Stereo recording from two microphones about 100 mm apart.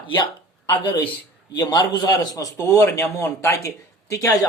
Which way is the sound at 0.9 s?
55° left (ahead or behind).